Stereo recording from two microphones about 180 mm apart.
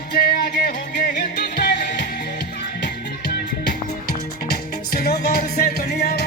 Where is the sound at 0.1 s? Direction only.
60° left (ahead or behind).